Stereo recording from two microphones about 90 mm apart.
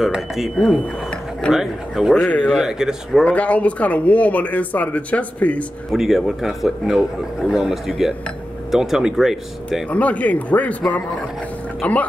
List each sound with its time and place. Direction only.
0.0 s a man's voice: 5° right (ahead or behind)
2.2 s speech: 10° left (ahead or behind)
2.6 s a man's voice: 5° right (ahead or behind)
3.3 s speech: 15° left (ahead or behind)
5.9 s a man's voice: centre (ahead or behind)
9.8 s speech: 15° left (ahead or behind)
11.8 s speech: 15° left (ahead or behind)